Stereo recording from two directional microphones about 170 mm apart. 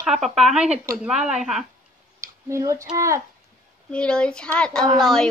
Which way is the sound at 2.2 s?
20° right (ahead or behind).